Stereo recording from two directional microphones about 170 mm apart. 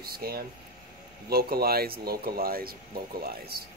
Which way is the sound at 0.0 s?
65° right (ahead or behind).